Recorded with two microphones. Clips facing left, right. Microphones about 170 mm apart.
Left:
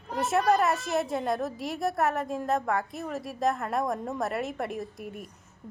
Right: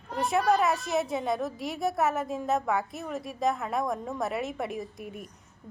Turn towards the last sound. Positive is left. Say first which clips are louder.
# left 1 dB
turn(degrees=0)  # may be behind; listen again after turning